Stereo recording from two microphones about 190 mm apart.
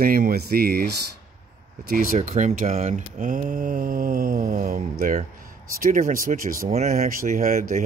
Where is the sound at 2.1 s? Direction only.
40° right (ahead or behind).